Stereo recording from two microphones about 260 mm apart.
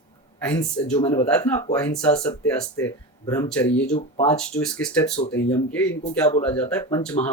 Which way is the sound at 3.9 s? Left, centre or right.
Left.